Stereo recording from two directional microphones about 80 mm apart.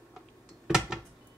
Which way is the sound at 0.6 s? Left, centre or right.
Centre.